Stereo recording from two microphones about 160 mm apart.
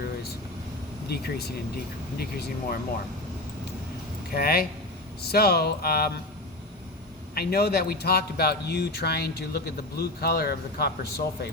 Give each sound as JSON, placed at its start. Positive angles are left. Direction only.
{"t": 1.0, "sound": "speech", "side_deg": 85}
{"t": 4.4, "sound": "speech", "side_deg": 70}
{"t": 7.3, "sound": "speech", "side_deg": 75}